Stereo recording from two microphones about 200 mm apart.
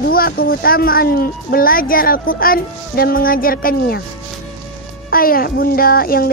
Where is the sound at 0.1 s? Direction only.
45° left (ahead or behind).